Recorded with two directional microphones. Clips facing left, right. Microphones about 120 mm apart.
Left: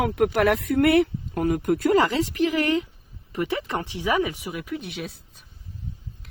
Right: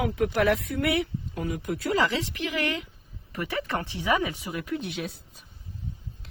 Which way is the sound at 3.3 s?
20° left (ahead or behind).